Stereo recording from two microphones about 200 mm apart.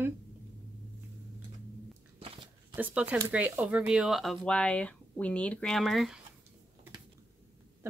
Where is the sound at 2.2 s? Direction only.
30° right (ahead or behind).